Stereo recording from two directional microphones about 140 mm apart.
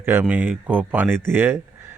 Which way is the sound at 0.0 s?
15° right (ahead or behind).